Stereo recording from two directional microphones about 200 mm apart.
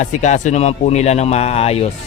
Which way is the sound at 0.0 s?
35° left (ahead or behind).